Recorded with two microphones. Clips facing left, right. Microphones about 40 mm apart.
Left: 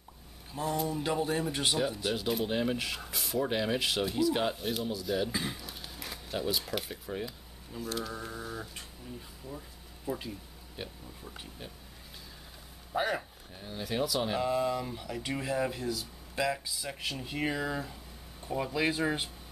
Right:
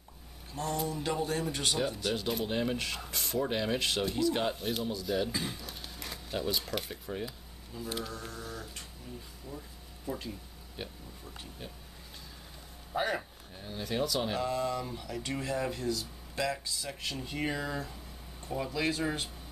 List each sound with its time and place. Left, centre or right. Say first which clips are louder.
0.5 s a man's voice: left 2 dB; centre
8.3 s a man's voice: left 2 dB; centre
11.2 s speech: even; centre
12.9 s speech: left 1 dB; centre